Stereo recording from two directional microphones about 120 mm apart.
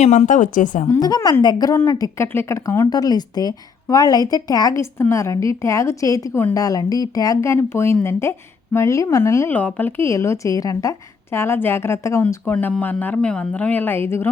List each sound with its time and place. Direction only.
0.0 s a woman's voice: 75° left (ahead or behind); by 0.9 s 90° left
0.9 s a woman's voice: 35° left (ahead or behind)